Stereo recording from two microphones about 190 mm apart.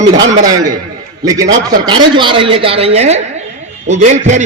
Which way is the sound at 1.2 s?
20° right (ahead or behind).